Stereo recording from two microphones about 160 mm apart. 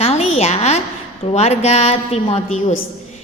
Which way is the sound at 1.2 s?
40° left (ahead or behind).